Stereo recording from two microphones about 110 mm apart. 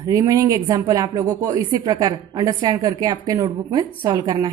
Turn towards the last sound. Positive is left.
turn(degrees=-40)  # may be behind; listen again after turning